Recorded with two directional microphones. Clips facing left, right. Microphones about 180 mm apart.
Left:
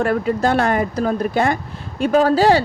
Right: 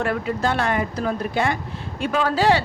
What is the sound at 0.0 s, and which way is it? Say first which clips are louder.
Speech: left 5 dB; 40° left (ahead or behind).